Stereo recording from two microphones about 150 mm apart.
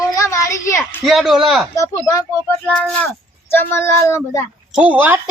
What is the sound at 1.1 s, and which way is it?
Speech, centre (ahead or behind).